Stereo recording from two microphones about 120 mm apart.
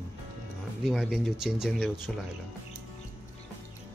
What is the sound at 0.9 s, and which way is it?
Speech, centre (ahead or behind).